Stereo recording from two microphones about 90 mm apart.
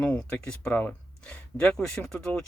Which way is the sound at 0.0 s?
10° left (ahead or behind).